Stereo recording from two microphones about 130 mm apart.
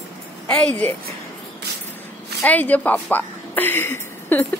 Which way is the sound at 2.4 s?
10° left (ahead or behind).